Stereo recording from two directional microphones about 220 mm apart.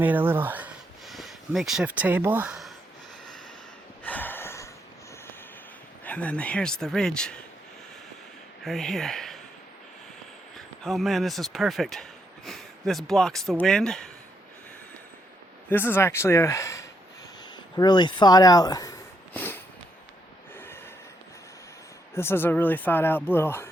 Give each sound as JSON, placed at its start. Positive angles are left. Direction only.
{"t": 0.0, "sound": "speech", "side_deg": -10}
{"t": 4.0, "sound": "a sound", "side_deg": 10}
{"t": 6.1, "sound": "speech", "side_deg": 5}
{"t": 8.6, "sound": "speech", "side_deg": 0}
{"t": 10.8, "sound": "speech", "side_deg": 0}
{"t": 15.7, "sound": "speech", "side_deg": 10}
{"t": 22.1, "sound": "speech", "side_deg": 10}